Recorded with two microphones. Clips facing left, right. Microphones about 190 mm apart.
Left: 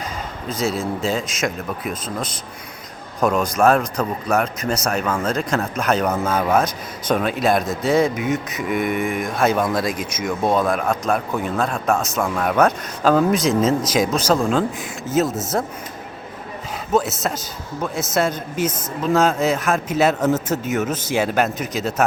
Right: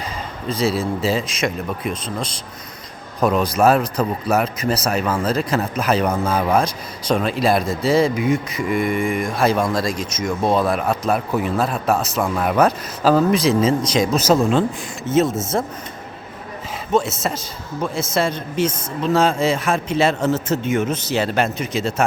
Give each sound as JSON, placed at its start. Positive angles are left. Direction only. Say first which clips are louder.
{"t": 0.4, "sound": "a man's voice", "louder": "right 3 dB", "side_deg": 0}
{"t": 14.2, "sound": "a man's voice", "louder": "right 2 dB", "side_deg": -5}
{"t": 16.9, "sound": "a man's voice", "louder": "even", "side_deg": 0}
{"t": 20.9, "sound": "speech", "louder": "right 1 dB", "side_deg": 45}
{"t": 21.2, "sound": "a man's voice", "louder": "left 1 dB", "side_deg": 5}